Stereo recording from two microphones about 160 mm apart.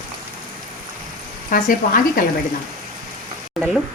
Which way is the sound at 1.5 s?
60° left (ahead or behind).